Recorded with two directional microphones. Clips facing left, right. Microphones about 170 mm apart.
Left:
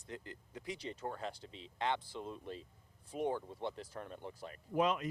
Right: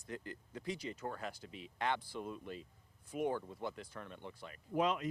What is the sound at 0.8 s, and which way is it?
Speech, 30° left (ahead or behind).